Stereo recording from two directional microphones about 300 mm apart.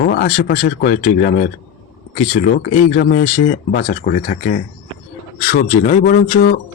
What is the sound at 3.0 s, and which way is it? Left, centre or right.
Speech, left.